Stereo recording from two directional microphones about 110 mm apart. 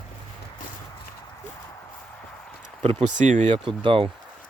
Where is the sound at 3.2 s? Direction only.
90° right.